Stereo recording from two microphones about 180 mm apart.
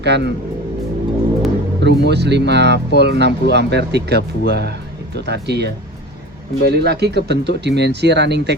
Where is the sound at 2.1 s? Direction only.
70° right (ahead or behind).